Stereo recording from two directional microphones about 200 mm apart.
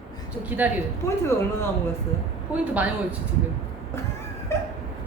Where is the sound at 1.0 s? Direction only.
15° left (ahead or behind).